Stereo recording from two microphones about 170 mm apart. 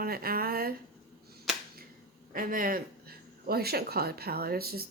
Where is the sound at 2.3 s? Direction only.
55° right (ahead or behind).